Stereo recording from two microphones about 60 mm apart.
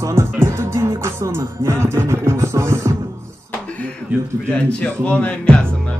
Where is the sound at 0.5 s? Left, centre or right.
Right.